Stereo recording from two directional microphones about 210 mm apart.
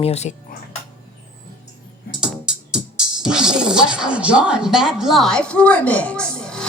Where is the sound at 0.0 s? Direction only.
30° left (ahead or behind).